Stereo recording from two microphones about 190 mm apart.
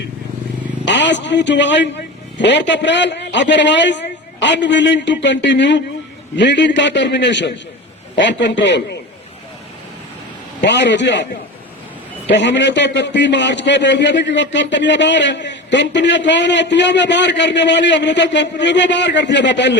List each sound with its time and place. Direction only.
0.9 s a man's voice: 70° left (ahead or behind)
10.6 s a man's voice: 70° left (ahead or behind)
12.3 s a man's voice: 70° left (ahead or behind)